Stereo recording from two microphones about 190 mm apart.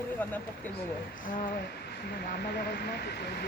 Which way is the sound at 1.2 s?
45° left (ahead or behind).